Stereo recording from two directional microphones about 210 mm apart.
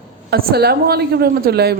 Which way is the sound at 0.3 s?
50° right (ahead or behind).